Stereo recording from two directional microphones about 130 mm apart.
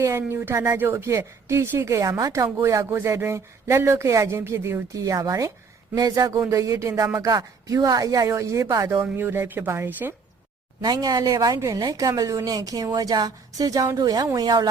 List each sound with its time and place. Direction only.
0.0 s speech: 20° right (ahead or behind)
10.8 s speech: 30° right (ahead or behind)